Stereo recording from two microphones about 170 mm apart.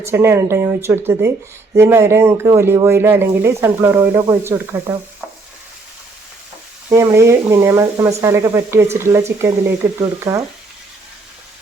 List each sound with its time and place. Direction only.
0.0 s speech: 15° right (ahead or behind)
6.9 s speech: 15° right (ahead or behind)